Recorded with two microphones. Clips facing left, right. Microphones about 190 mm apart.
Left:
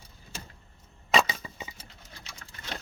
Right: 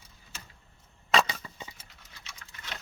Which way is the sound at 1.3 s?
10° left (ahead or behind).